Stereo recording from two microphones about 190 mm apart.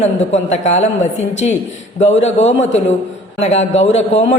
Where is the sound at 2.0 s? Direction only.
35° left (ahead or behind).